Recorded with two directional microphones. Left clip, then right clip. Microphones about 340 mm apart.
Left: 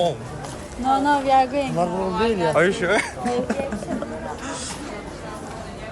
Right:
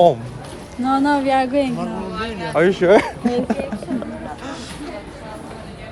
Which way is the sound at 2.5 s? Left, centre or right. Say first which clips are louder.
Right 10 dB; centre.